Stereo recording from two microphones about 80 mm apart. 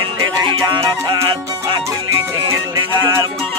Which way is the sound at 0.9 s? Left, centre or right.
Right.